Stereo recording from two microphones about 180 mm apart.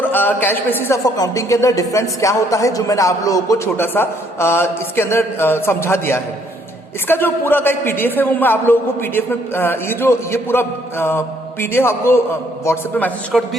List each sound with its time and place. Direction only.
0.0 s speech: 10° left (ahead or behind)